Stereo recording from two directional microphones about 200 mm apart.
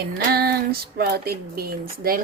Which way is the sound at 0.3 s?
50° right (ahead or behind).